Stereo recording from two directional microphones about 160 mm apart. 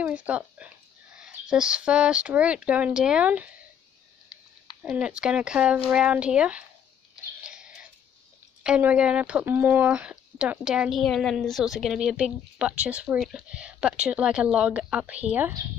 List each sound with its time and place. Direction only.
0.0 s speech: 10° right (ahead or behind)
4.8 s speech: 5° right (ahead or behind)
7.4 s a sound: 5° right (ahead or behind)
8.6 s speech: 5° right (ahead or behind)